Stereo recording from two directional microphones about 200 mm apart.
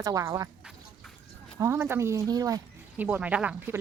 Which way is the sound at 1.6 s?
10° right (ahead or behind).